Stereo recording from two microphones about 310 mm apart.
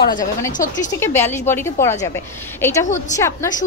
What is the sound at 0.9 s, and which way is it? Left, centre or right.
A woman's voice, centre.